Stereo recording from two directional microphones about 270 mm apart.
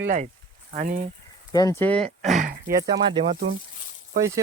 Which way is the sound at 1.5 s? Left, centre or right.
Centre.